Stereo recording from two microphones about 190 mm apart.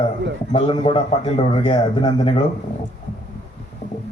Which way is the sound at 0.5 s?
30° left (ahead or behind).